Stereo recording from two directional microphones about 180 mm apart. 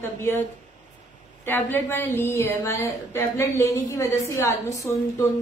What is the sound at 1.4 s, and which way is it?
A woman's voice, 10° left (ahead or behind).